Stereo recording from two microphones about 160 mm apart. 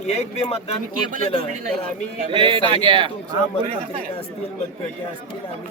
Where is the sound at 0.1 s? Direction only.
45° left (ahead or behind).